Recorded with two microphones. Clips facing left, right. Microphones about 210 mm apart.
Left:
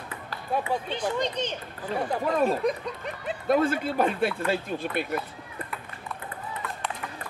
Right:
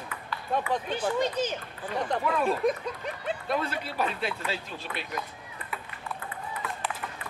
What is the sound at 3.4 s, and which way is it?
Speech, 50° left (ahead or behind).